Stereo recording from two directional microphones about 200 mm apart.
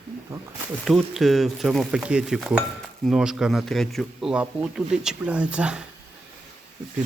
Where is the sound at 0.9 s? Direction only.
Centre (ahead or behind).